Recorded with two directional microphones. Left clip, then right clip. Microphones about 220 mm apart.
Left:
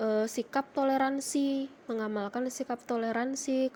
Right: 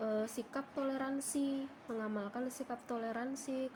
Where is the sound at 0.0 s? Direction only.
35° left (ahead or behind).